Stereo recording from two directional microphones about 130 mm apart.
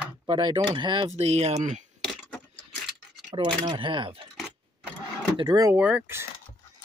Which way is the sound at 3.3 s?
40° right (ahead or behind).